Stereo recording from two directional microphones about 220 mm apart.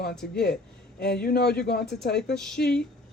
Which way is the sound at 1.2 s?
45° left (ahead or behind).